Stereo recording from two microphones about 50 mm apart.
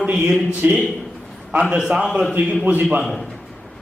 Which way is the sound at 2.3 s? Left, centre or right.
Right.